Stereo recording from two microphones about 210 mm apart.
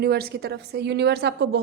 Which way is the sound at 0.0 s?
50° right (ahead or behind).